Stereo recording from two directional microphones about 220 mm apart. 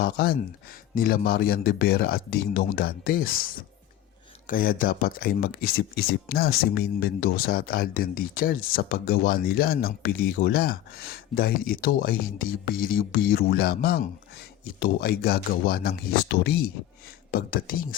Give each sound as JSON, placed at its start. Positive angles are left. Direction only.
{"t": 0.0, "sound": "speech", "side_deg": 45}
{"t": 4.4, "sound": "speech", "side_deg": 40}